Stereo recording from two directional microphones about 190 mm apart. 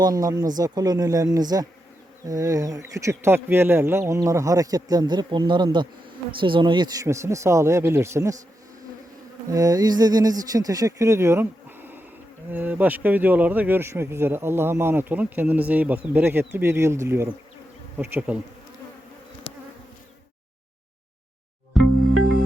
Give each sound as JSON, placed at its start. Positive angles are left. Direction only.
{"t": 0.0, "sound": "speech", "side_deg": -20}
{"t": 9.5, "sound": "speech", "side_deg": -15}
{"t": 17.9, "sound": "bee", "side_deg": -10}
{"t": 21.7, "sound": "music", "side_deg": 0}